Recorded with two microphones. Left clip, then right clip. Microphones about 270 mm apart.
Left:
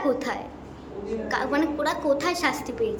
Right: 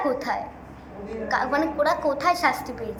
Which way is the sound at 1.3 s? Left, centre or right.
Centre.